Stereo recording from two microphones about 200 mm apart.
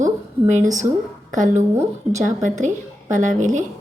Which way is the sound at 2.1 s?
40° right (ahead or behind).